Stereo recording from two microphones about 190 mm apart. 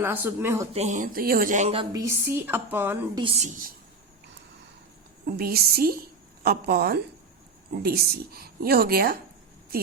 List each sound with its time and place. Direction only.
0.0 s a woman's voice: 10° right (ahead or behind)
0.7 s speech: 35° right (ahead or behind)
1.9 s a woman's voice: 15° right (ahead or behind)
3.2 s speech: 35° right (ahead or behind)
5.2 s a woman's voice: 55° right (ahead or behind)